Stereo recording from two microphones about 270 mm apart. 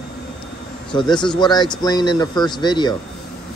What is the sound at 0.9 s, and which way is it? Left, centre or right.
Speech, centre.